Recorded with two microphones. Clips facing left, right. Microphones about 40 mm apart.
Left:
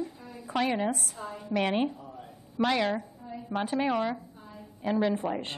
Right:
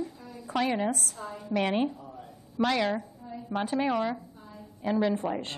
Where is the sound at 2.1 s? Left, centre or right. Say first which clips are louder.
Right 1 dB; centre.